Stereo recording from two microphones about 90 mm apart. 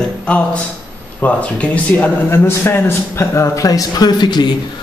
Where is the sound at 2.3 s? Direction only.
25° left (ahead or behind); by 4.5 s 55° left (ahead or behind).